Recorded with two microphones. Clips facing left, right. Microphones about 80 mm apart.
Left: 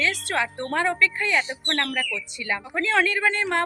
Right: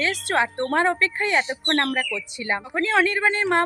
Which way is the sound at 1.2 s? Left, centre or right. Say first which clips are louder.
Right 2 dB; right.